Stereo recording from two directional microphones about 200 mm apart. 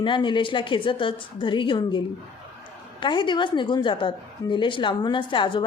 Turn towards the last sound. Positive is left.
turn(degrees=25)  # may be behind; listen again after turning